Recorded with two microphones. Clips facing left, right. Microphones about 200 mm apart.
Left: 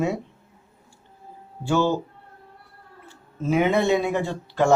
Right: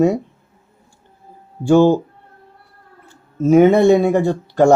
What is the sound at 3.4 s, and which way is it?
Speech, 45° right (ahead or behind).